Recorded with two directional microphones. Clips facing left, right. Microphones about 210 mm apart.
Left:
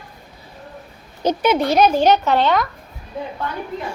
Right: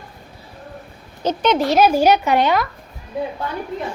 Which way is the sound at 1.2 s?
10° left (ahead or behind).